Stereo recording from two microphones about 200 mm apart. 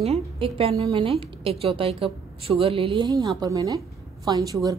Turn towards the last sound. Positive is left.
turn(degrees=-20)  # may be behind; listen again after turning